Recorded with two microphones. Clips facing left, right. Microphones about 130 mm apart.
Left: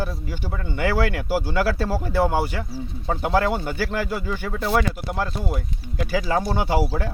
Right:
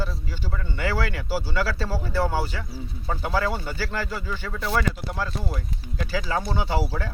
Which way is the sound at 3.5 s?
50° left (ahead or behind).